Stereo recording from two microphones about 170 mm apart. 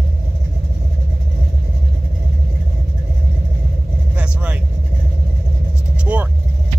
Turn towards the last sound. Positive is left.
turn(degrees=-10)  # may be behind; listen again after turning